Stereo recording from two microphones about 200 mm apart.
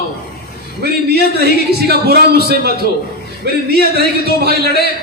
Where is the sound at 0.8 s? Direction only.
55° right (ahead or behind).